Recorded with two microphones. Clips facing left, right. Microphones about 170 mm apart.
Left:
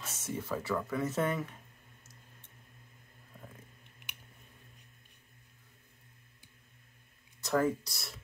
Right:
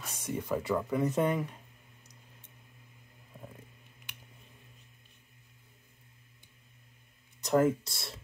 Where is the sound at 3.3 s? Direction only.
15° right (ahead or behind).